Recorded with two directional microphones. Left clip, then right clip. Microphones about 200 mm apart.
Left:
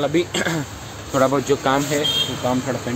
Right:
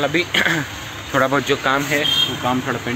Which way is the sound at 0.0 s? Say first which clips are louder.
Right 3 dB; 15° left (ahead or behind).